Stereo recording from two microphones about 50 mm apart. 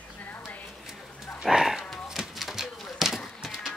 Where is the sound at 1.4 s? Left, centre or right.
Centre.